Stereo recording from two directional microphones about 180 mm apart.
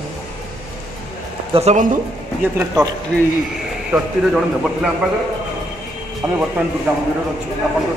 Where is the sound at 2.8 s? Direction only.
20° right (ahead or behind).